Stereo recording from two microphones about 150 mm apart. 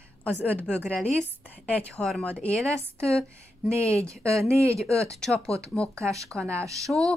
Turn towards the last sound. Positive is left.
turn(degrees=5)  # may be behind; listen again after turning